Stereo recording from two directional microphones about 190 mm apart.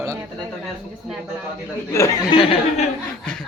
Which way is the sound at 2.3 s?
30° left (ahead or behind).